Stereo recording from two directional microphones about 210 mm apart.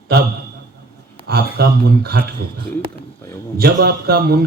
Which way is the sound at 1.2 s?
50° right (ahead or behind).